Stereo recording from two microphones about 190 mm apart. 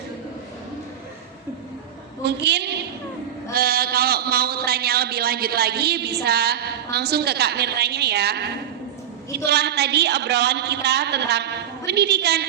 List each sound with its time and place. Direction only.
2.2 s a man's voice: 60° right (ahead or behind)
3.5 s a man's voice: 50° right (ahead or behind)
9.5 s a man's voice: 60° right (ahead or behind)